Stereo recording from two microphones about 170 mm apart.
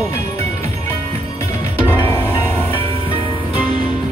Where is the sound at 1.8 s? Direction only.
15° left (ahead or behind).